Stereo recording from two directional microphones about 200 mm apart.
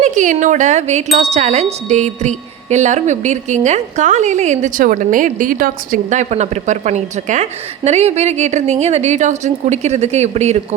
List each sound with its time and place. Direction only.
0.0 s wind chime: 40° right (ahead or behind)